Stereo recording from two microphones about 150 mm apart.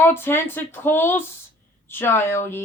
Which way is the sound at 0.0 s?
15° left (ahead or behind).